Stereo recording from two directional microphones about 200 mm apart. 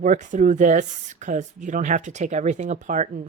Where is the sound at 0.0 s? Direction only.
40° right (ahead or behind).